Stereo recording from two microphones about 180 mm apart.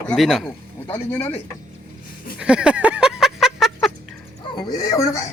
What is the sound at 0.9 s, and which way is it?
Speech, 10° left (ahead or behind).